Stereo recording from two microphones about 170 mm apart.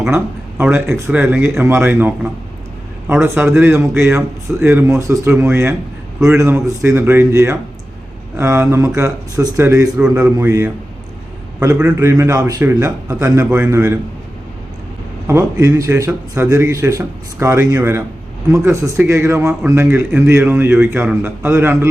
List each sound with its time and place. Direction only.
0.6 s a man's voice: 15° right (ahead or behind)
15.3 s a man's voice: 15° right (ahead or behind)